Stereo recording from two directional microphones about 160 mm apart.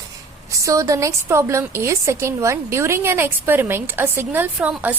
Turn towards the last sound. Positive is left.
turn(degrees=-10)  # may be behind; listen again after turning